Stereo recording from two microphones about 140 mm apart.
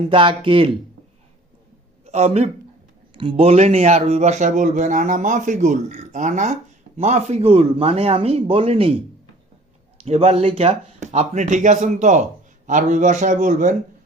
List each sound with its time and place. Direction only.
0.1 s speech: 35° right (ahead or behind)
2.0 s a man's voice: 50° right (ahead or behind)
10.0 s speech: 50° right (ahead or behind)